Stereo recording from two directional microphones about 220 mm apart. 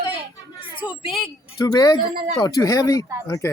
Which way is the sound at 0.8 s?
25° left (ahead or behind).